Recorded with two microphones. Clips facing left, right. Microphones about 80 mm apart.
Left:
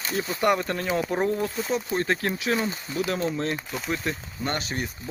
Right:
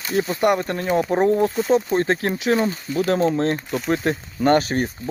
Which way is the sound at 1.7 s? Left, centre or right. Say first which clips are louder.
Right 6 dB; right.